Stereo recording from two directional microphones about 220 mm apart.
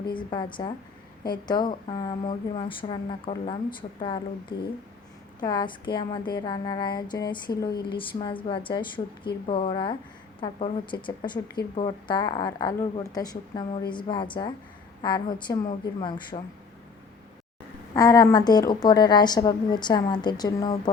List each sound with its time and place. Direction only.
0.1 s a woman's voice: 20° left (ahead or behind)
17.9 s a woman's voice: 15° left (ahead or behind)